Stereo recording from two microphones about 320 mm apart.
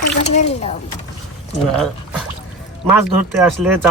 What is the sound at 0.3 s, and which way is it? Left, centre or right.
Speech, centre.